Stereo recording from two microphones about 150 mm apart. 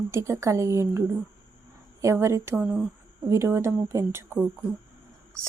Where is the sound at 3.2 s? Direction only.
20° right (ahead or behind).